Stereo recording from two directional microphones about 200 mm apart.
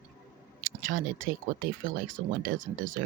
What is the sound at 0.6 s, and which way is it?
Speech, 40° right (ahead or behind).